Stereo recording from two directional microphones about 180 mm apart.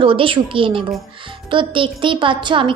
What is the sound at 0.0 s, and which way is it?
A woman's voice, 30° right (ahead or behind).